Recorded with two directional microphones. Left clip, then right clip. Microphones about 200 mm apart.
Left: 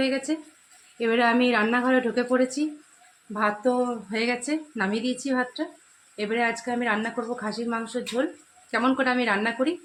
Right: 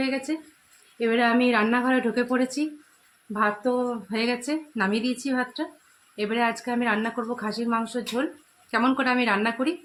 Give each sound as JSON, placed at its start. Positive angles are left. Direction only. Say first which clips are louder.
{"t": 0.0, "sound": "speech", "louder": "left 2 dB", "side_deg": 0}